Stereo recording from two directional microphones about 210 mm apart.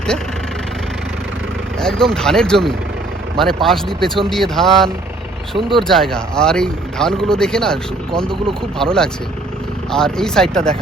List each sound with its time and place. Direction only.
1.8 s speech: centre (ahead or behind)
5.5 s speech: 25° right (ahead or behind)
5.9 s speech: centre (ahead or behind)